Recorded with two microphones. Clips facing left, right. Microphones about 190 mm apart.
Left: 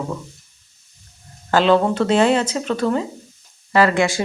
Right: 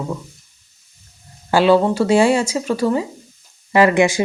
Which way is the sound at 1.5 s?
10° right (ahead or behind).